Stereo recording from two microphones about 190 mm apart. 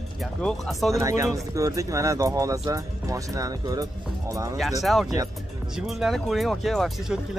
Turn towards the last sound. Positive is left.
turn(degrees=0)  # may be behind; listen again after turning